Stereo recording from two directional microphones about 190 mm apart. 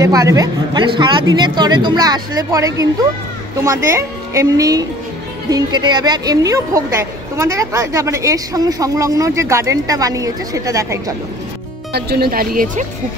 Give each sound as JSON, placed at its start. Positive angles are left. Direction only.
{"t": 0.0, "sound": "a woman's voice", "side_deg": -15}
{"t": 11.9, "sound": "speech", "side_deg": -55}